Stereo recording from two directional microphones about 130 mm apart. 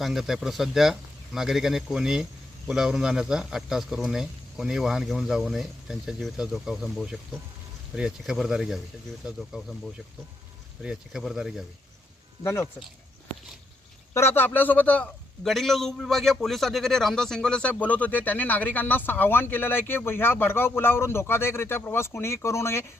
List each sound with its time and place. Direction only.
0.0 s a man's voice: centre (ahead or behind)
12.4 s speech: 20° left (ahead or behind)
14.1 s a man's voice: 20° left (ahead or behind)